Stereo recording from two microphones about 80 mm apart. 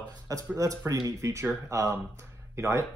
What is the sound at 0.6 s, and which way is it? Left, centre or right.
Speech, right.